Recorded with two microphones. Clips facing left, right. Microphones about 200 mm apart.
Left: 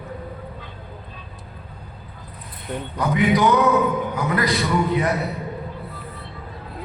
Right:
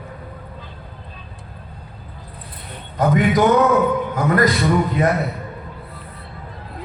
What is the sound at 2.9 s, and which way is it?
A man's voice, 45° right (ahead or behind).